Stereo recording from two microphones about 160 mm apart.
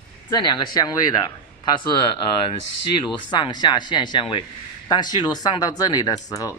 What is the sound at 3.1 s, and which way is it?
Speech, 30° left (ahead or behind).